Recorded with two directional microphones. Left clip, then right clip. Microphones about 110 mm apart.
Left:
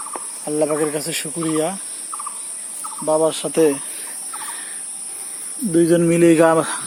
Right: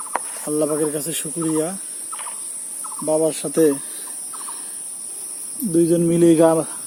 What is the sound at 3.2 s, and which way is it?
Speech, 50° right (ahead or behind).